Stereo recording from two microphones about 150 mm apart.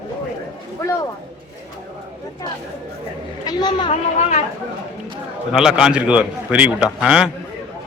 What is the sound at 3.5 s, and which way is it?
Speech, 30° left (ahead or behind).